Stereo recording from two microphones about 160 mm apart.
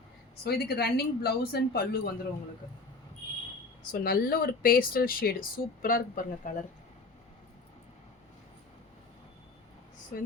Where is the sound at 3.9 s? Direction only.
70° left (ahead or behind).